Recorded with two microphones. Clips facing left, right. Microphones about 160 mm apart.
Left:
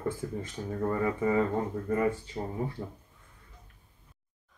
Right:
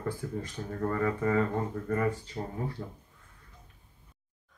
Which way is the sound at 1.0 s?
15° left (ahead or behind).